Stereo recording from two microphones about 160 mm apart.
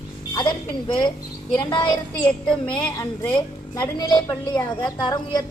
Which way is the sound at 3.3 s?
25° left (ahead or behind).